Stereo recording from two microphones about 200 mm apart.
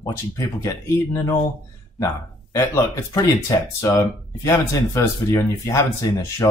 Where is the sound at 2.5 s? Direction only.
15° left (ahead or behind).